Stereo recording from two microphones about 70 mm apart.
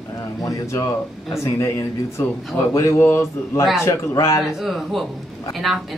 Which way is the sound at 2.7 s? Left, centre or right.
Left.